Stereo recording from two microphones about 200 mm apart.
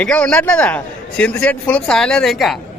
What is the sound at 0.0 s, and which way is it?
A man's voice, 5° left (ahead or behind).